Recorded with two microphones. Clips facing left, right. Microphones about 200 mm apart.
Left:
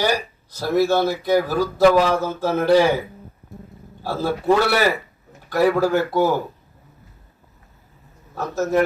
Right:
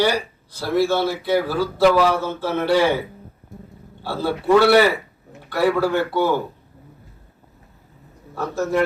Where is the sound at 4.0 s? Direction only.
45° left (ahead or behind).